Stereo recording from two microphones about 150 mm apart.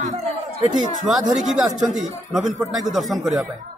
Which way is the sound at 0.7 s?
60° right (ahead or behind).